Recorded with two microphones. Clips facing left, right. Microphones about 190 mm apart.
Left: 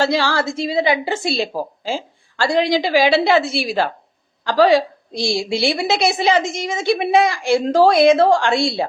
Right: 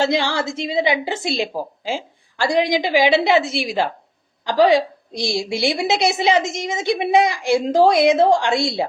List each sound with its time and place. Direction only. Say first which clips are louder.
0.0 s a woman's voice: left 1 dB; 20° right (ahead or behind)